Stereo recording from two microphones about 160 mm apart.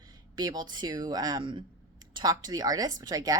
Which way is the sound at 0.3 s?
25° right (ahead or behind).